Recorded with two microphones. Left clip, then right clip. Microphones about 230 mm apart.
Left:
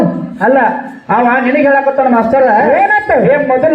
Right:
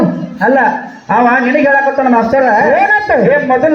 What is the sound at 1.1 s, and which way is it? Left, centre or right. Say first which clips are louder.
A man's voice: right 1 dB; left.